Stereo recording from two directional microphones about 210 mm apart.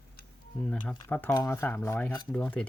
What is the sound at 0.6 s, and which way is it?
Speech, 5° left (ahead or behind).